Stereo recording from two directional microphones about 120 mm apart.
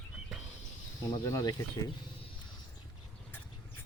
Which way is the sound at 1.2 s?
30° left (ahead or behind).